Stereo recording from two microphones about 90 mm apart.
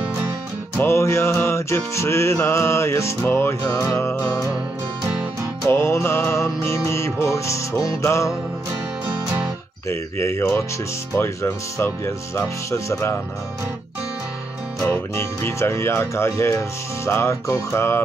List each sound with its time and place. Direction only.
0.7 s speech: 30° left (ahead or behind)
2.4 s music: 30° left (ahead or behind)
3.8 s speech: 25° left (ahead or behind)
5.7 s music: 25° left (ahead or behind)
9.0 s music: 15° right (ahead or behind)
9.8 s music: 30° left (ahead or behind)
11.1 s speech: 25° left (ahead or behind)
14.8 s speech: 25° left (ahead or behind)